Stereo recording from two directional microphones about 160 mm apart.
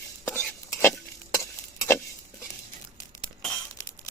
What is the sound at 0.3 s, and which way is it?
Stir, 5° left (ahead or behind).